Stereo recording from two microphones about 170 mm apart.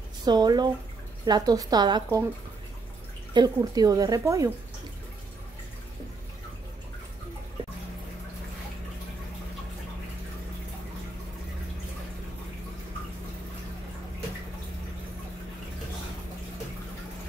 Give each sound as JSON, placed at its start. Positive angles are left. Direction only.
{"t": 0.2, "sound": "speech", "side_deg": -25}
{"t": 3.3, "sound": "speech", "side_deg": -20}